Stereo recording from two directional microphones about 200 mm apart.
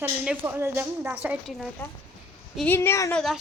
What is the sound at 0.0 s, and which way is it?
A woman's voice, 10° right (ahead or behind).